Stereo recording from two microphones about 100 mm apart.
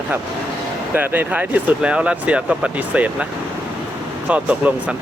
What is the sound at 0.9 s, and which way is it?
Speech, 20° right (ahead or behind).